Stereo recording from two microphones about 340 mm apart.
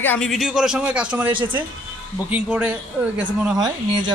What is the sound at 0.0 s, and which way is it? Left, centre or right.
A woman's voice, centre.